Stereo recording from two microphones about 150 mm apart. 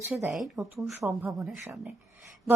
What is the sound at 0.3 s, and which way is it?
Speech, centre (ahead or behind).